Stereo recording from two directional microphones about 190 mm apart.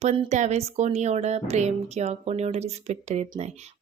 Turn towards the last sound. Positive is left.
turn(degrees=-35)  # may be behind; listen again after turning